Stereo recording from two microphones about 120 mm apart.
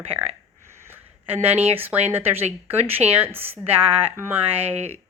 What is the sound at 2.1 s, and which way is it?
A woman's voice, 15° right (ahead or behind).